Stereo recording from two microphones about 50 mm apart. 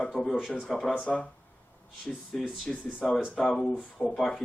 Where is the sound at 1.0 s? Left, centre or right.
Left.